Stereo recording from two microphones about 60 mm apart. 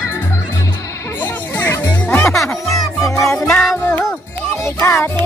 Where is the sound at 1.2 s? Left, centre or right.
Left.